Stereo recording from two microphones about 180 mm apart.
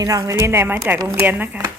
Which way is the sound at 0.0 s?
20° right (ahead or behind).